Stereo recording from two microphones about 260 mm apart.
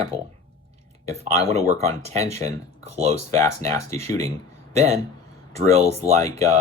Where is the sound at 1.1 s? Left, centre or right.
Right.